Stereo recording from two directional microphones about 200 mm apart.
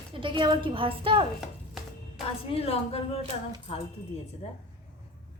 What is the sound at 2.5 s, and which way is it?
Speech, 30° left (ahead or behind).